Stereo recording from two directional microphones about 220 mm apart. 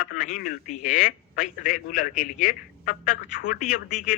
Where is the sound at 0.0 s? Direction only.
40° left (ahead or behind).